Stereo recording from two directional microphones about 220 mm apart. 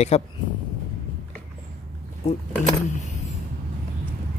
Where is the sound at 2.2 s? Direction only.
30° left (ahead or behind).